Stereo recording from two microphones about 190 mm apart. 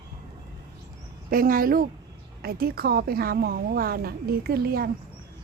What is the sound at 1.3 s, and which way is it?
A woman's voice, 50° right (ahead or behind).